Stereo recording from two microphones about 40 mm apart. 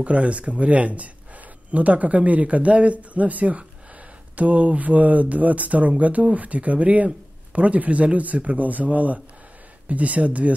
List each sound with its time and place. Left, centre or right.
0.0 s speech: right